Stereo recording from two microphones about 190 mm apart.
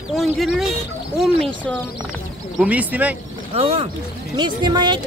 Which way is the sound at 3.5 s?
30° right (ahead or behind).